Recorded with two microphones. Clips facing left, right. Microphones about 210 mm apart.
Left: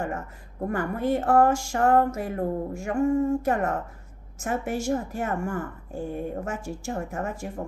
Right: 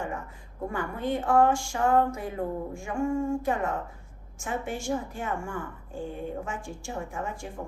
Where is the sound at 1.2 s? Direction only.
40° left (ahead or behind).